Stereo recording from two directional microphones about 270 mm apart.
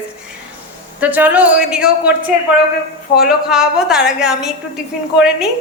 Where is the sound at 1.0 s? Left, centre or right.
Centre.